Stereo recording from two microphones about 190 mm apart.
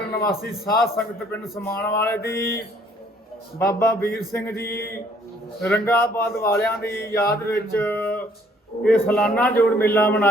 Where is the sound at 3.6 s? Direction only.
15° left (ahead or behind).